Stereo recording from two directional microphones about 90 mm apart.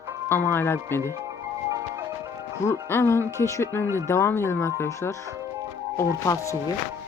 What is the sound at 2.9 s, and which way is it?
Speech, 25° left (ahead or behind).